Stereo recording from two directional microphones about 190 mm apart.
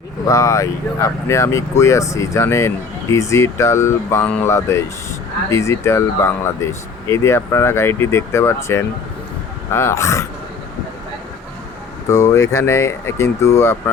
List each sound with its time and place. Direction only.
0.3 s speech: 15° left (ahead or behind)
12.0 s speech: 15° left (ahead or behind)